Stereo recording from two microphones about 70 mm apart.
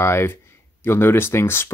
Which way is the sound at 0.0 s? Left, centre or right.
Left.